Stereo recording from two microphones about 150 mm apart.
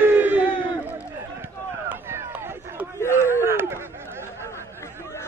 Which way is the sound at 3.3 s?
15° right (ahead or behind).